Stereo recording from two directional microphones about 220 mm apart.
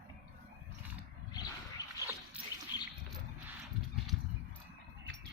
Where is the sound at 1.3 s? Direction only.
20° left (ahead or behind).